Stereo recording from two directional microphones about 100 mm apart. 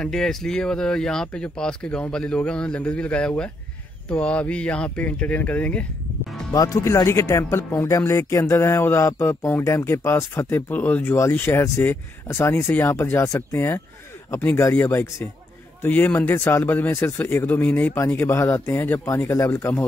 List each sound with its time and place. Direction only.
0.0 s speech: 5° left (ahead or behind)
6.5 s speech: 35° left (ahead or behind)